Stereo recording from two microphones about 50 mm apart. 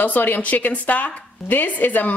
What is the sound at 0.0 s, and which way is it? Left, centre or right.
A woman's voice, left.